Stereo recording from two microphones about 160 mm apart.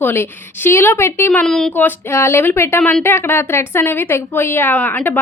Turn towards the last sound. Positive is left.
turn(degrees=10)  # may be behind; listen again after turning